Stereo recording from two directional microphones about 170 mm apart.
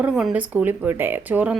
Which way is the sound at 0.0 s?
5° right (ahead or behind).